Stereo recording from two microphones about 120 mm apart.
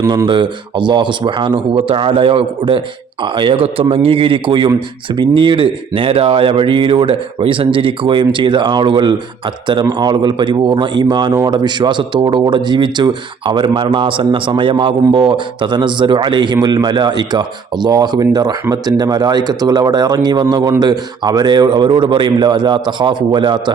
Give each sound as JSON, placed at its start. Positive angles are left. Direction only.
{"t": 0.3, "sound": "speech", "side_deg": -40}